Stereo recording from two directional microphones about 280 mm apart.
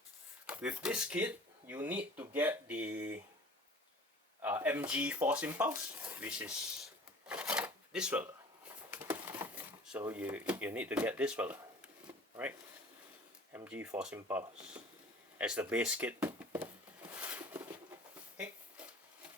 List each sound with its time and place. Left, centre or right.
0.4 s speech: centre
4.4 s speech: centre
7.3 s shuffling cards: centre
8.9 s speech: centre
12.0 s a sound: centre
13.5 s speech: centre
15.4 s a sound: centre